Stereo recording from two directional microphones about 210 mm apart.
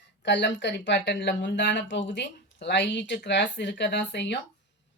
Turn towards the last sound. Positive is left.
turn(degrees=55)  # may be behind; listen again after turning